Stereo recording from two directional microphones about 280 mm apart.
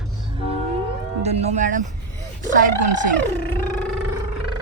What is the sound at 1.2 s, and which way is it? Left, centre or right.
Speech, right.